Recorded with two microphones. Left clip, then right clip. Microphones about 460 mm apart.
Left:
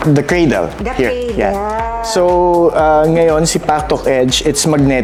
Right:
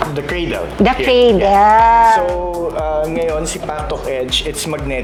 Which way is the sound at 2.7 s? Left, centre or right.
Left.